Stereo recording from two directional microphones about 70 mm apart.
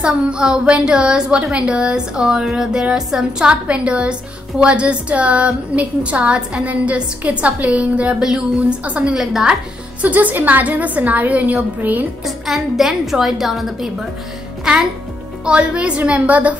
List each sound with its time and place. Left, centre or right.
0.0 s a woman's voice: centre
10.0 s a woman's voice: right
12.3 s a woman's voice: centre; by 16.5 s right